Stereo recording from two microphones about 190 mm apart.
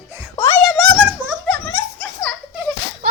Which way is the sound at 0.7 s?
Centre (ahead or behind).